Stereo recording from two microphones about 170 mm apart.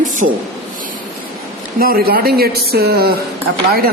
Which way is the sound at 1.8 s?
60° right (ahead or behind).